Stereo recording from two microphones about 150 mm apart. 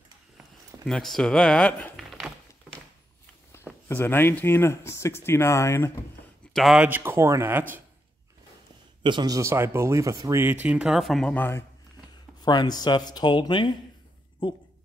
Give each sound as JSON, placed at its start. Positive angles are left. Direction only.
{"t": 0.8, "sound": "speech", "side_deg": 5}
{"t": 2.0, "sound": "a sound", "side_deg": 0}
{"t": 3.5, "sound": "a sound", "side_deg": 15}
{"t": 3.9, "sound": "speech", "side_deg": 15}
{"t": 6.5, "sound": "speech", "side_deg": 0}
{"t": 6.9, "sound": "speech", "side_deg": -15}
{"t": 9.0, "sound": "speech", "side_deg": -30}
{"t": 11.3, "sound": "speech", "side_deg": 15}
{"t": 12.4, "sound": "speech", "side_deg": 30}